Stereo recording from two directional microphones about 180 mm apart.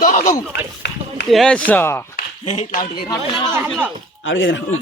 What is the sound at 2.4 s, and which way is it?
Speech, 40° left (ahead or behind).